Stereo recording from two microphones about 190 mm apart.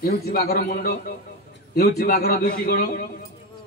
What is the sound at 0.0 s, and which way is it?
A man's voice, 55° left (ahead or behind).